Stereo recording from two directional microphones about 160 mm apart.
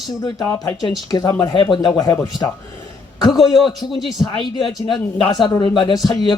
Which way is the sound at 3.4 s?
Centre (ahead or behind).